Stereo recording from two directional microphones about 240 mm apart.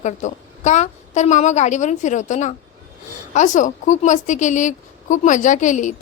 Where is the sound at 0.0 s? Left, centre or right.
Left.